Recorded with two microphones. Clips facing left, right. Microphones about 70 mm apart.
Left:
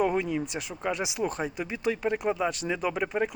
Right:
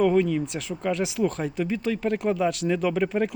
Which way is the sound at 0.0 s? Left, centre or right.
Centre.